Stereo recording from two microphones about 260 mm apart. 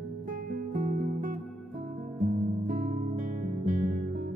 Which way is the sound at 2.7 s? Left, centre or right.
Right.